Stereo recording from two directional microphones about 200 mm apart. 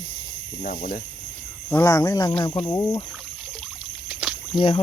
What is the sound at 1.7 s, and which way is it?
Speech, 15° left (ahead or behind).